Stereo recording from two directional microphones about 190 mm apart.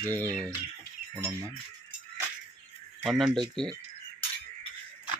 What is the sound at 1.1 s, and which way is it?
Speech, 15° right (ahead or behind).